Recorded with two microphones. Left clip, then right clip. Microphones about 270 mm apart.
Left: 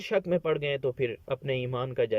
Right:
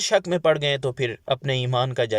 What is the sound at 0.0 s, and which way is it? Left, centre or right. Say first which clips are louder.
Speech: right 7 dB; centre.